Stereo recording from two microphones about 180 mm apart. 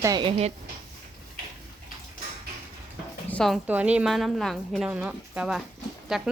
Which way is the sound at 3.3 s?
5° left (ahead or behind).